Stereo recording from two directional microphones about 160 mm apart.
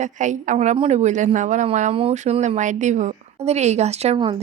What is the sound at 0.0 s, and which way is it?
A woman's voice, 50° right (ahead or behind).